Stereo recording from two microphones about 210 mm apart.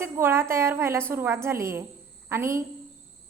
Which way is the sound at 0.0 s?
10° right (ahead or behind).